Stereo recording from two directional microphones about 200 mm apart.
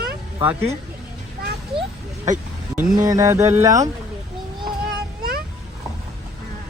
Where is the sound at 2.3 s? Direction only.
40° right (ahead or behind).